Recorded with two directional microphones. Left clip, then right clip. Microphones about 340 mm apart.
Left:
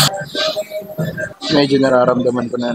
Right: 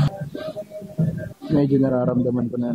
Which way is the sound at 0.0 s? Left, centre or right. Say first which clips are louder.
Left 13 dB; centre.